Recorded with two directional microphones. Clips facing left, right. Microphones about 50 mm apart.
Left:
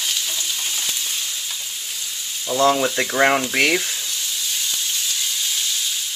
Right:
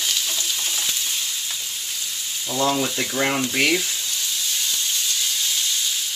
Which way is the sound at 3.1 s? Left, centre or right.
Left.